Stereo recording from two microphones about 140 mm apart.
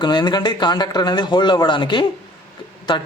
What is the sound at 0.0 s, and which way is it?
A man's voice, 30° left (ahead or behind).